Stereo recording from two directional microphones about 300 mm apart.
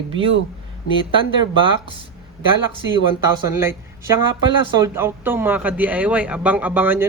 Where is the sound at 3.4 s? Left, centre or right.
Centre.